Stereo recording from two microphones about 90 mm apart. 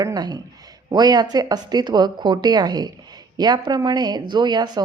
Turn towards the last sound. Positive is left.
turn(degrees=-55)  # may be behind; listen again after turning